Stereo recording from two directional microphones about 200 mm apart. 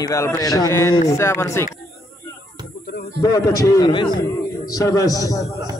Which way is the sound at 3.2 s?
15° left (ahead or behind).